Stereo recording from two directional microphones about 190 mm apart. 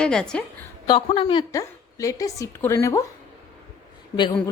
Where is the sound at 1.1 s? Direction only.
30° left (ahead or behind).